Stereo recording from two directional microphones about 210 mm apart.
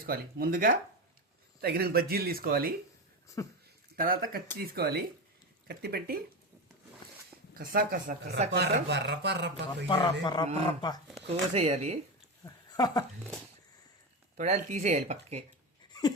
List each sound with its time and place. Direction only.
0.0 s speech: 45° right (ahead or behind)
3.4 s speech: 15° left (ahead or behind)
3.9 s speech: 45° right (ahead or behind)
7.3 s speech: 45° right (ahead or behind)
8.5 s speech: 50° right (ahead or behind)
9.9 s a man's voice: 20° left (ahead or behind)
11.3 s speech: 30° right (ahead or behind)
12.5 s speech: 20° left (ahead or behind)
14.3 s speech: 35° right (ahead or behind)
15.9 s a sound: 20° left (ahead or behind)